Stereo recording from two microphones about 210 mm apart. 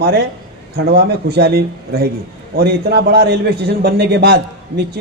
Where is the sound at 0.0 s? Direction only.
50° right (ahead or behind).